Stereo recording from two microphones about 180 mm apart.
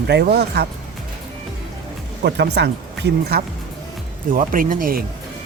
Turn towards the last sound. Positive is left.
turn(degrees=-50)  # may be behind; listen again after turning